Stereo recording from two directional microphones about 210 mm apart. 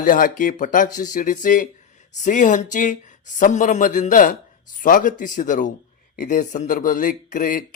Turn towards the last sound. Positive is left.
turn(degrees=40)  # may be behind; listen again after turning